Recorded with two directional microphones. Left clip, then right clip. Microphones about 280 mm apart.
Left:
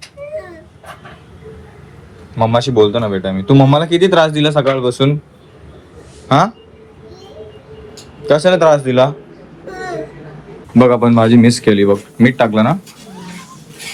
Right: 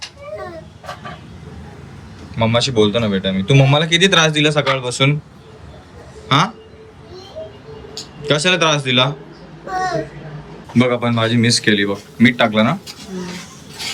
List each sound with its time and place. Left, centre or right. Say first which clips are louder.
2.4 s speech: left 4 dB; centre
6.2 s speech: left 4 dB; centre
8.2 s speech: left 5 dB; centre
10.8 s speech: left 7 dB; centre